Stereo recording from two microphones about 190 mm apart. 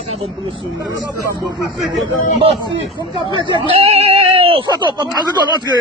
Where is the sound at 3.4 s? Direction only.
25° left (ahead or behind).